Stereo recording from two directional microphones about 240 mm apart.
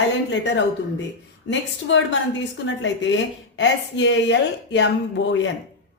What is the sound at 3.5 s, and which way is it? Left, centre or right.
Speech, left.